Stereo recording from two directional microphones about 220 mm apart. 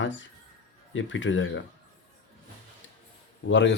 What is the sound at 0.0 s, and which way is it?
A man's voice, 60° left (ahead or behind).